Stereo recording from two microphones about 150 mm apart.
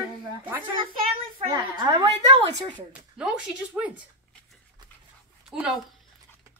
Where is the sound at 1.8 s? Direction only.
30° right (ahead or behind).